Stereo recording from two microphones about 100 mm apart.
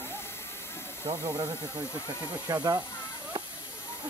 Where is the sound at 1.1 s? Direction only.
30° right (ahead or behind).